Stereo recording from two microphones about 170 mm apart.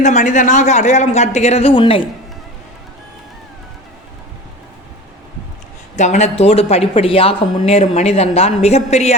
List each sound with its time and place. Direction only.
0.0 s speech: 45° left (ahead or behind); by 2.0 s 30° left (ahead or behind)
6.0 s speech: 40° left (ahead or behind)